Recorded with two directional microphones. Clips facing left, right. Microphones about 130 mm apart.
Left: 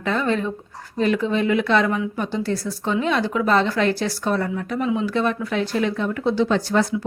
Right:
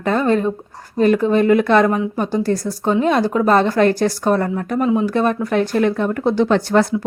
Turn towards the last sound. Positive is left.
turn(degrees=-60)  # may be behind; listen again after turning